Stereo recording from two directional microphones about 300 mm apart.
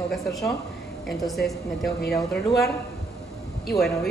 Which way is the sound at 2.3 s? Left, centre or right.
Left.